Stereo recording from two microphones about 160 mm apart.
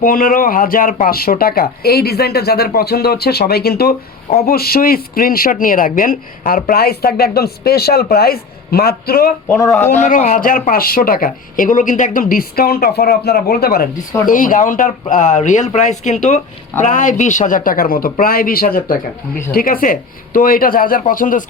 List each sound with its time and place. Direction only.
0.0 s speech: 60° left (ahead or behind)
10.0 s speech: 50° left (ahead or behind); by 13.8 s 70° left (ahead or behind)
14.3 s speech: 55° left (ahead or behind)